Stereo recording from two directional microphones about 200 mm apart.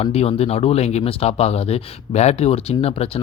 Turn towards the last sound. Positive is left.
turn(degrees=30)  # may be behind; listen again after turning